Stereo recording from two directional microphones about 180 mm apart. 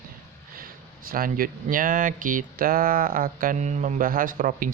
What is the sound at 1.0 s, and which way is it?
Speech, 50° right (ahead or behind).